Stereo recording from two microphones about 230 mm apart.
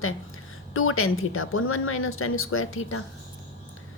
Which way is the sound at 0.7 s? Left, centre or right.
Left.